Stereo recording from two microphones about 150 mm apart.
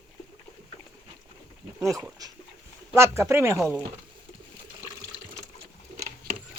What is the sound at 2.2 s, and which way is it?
Dog, 25° right (ahead or behind).